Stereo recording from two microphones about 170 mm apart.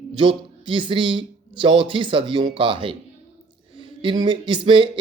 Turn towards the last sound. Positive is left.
turn(degrees=-30)  # may be behind; listen again after turning